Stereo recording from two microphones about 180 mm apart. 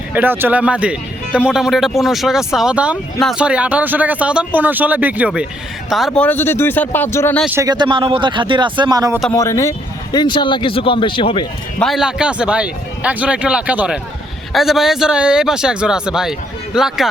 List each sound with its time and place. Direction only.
0.1 s speech: 10° right (ahead or behind)
6.1 s speech: 10° left (ahead or behind)
7.5 s speech: 20° right (ahead or behind)
9.3 s speech: 15° left (ahead or behind)
11.8 s speech: centre (ahead or behind)